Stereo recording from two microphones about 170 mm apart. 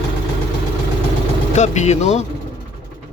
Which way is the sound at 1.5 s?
45° left (ahead or behind).